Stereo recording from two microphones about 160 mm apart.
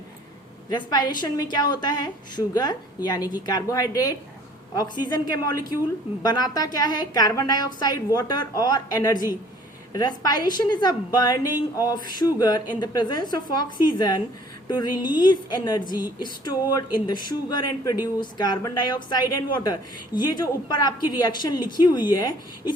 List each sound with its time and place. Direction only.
0.7 s speech: 25° left (ahead or behind)